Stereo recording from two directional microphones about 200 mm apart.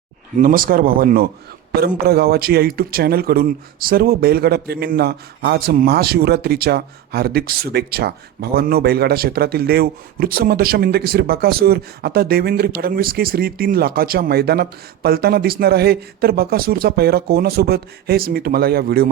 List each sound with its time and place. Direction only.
0.3 s speech: 45° right (ahead or behind)